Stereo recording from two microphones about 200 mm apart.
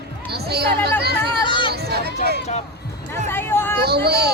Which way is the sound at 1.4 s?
25° left (ahead or behind).